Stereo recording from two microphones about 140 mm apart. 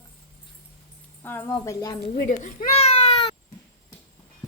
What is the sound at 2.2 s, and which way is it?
Speech, 85° left.